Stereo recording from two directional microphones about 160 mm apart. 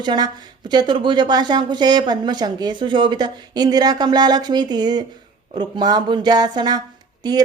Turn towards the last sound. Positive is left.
turn(degrees=-25)  # may be behind; listen again after turning